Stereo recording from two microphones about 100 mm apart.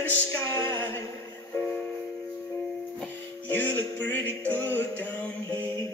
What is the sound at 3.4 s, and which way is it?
Music, 20° left (ahead or behind).